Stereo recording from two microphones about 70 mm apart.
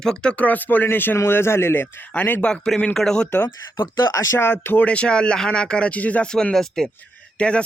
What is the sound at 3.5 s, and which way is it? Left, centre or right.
Speech, left.